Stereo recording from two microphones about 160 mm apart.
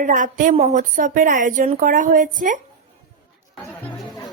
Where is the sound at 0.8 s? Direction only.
55° right (ahead or behind).